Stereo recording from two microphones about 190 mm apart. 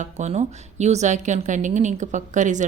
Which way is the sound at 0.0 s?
35° right (ahead or behind).